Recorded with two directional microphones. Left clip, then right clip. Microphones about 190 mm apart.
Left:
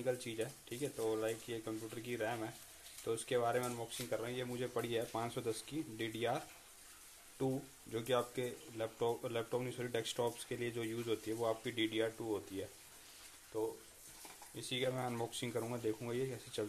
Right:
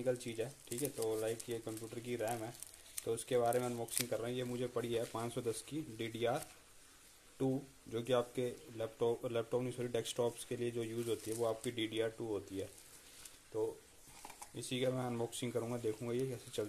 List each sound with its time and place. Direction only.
0.0 s speech: 20° right (ahead or behind)
7.9 s speech: 20° right (ahead or behind)
13.5 s speech: 30° right (ahead or behind)
14.9 s speech: 20° right (ahead or behind)